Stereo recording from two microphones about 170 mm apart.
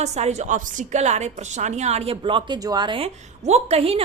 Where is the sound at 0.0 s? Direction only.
40° right (ahead or behind).